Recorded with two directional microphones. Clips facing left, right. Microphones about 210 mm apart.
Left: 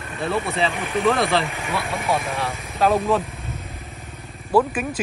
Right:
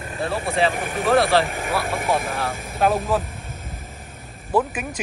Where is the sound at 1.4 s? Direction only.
50° right (ahead or behind).